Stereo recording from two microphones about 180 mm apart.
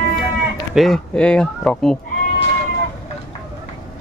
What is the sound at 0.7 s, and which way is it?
Speech, centre (ahead or behind).